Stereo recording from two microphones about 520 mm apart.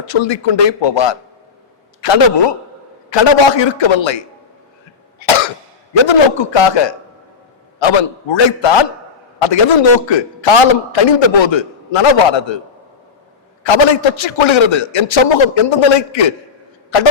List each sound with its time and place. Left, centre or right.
0.0 s a man's voice: left
5.2 s cough: left
6.1 s a man's voice: left
13.7 s a man's voice: left